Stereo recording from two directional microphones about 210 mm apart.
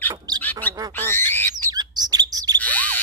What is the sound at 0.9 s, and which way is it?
Owl, 10° left (ahead or behind).